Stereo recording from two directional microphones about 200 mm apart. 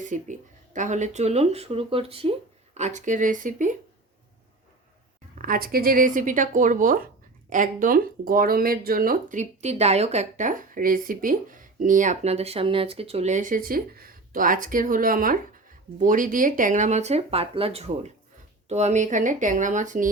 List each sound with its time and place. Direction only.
0.0 s speech: 40° right (ahead or behind)
5.4 s speech: 45° right (ahead or behind)